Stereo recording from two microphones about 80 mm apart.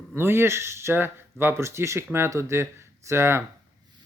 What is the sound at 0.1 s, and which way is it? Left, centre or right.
Speech, right.